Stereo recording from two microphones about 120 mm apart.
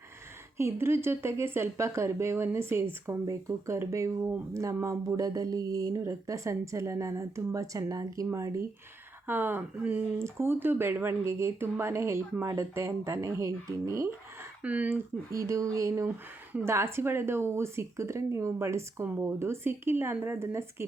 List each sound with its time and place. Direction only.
0.5 s speech: 20° right (ahead or behind)
14.6 s speech: 10° right (ahead or behind)